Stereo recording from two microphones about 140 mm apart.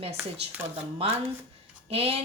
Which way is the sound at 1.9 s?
45° right (ahead or behind).